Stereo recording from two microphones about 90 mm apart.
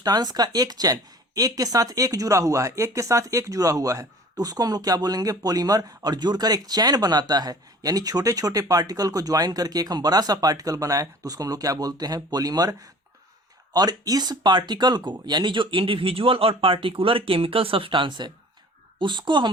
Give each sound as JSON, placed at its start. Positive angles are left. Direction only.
{"t": 0.0, "sound": "speech", "side_deg": -45}
{"t": 13.7, "sound": "a woman's voice", "side_deg": -45}